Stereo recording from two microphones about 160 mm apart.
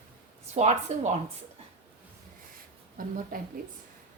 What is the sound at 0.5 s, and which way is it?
Speech, 45° right (ahead or behind).